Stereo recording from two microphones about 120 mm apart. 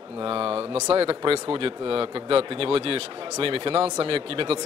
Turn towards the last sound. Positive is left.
turn(degrees=-50)  # may be behind; listen again after turning